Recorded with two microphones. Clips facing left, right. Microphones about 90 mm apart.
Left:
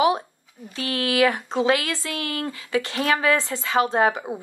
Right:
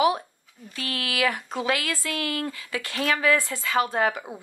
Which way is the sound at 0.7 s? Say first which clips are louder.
Left 7 dB; 25° left (ahead or behind).